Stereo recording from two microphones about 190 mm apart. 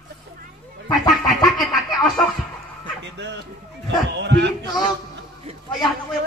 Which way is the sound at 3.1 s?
65° right (ahead or behind).